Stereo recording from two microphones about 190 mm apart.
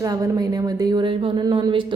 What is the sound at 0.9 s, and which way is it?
Speech, 25° right (ahead or behind).